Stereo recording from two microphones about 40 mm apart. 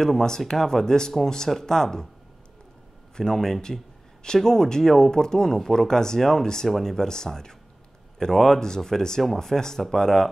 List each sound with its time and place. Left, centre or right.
0.0 s speech: centre
3.2 s speech: centre